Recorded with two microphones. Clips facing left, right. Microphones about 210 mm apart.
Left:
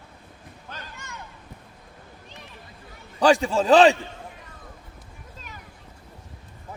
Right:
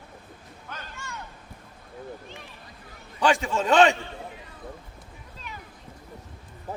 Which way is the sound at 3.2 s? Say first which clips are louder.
Left 4 dB; 35° left (ahead or behind).